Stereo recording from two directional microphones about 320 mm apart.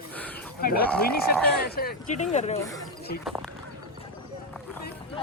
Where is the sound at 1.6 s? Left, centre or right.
Left.